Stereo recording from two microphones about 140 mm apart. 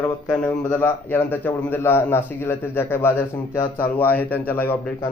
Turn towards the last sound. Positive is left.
turn(degrees=15)  # may be behind; listen again after turning